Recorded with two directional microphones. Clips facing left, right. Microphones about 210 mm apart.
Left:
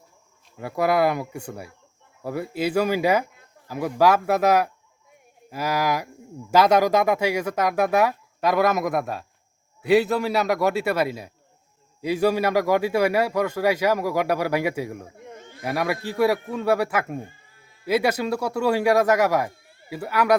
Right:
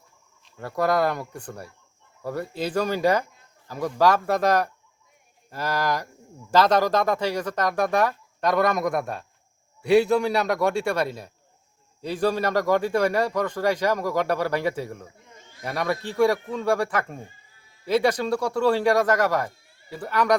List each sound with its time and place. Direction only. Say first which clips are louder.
0.5 s a man's voice: left 1 dB; 10° left (ahead or behind)
15.2 s a sound: left 10 dB; 60° left (ahead or behind)
15.6 s a man's voice: left 2 dB; 10° left (ahead or behind)